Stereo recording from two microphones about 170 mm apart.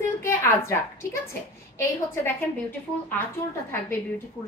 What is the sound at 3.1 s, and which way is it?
Speech, 10° left (ahead or behind).